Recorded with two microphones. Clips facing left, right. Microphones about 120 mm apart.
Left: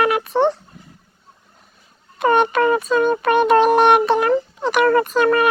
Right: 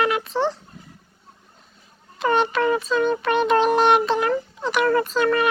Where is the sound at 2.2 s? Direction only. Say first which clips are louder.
Left 4 dB; 55° left (ahead or behind).